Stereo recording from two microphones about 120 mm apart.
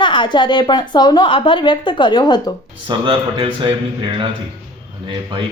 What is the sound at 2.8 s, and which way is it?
Speech, 45° right (ahead or behind).